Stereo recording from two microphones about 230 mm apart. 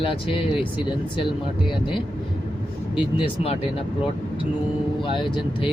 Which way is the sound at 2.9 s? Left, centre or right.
Left.